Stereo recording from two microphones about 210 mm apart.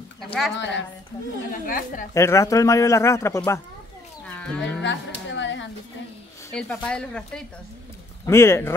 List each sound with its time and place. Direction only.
0.2 s a sound: centre (ahead or behind)
0.6 s a woman's voice: 60° left (ahead or behind)
1.5 s a woman's voice: 40° left (ahead or behind)
2.1 s speech: 15° left (ahead or behind)
4.8 s music: 60° left (ahead or behind)
6.5 s speech: 5° left (ahead or behind)